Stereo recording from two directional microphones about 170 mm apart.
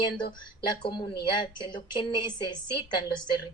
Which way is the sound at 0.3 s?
25° left (ahead or behind).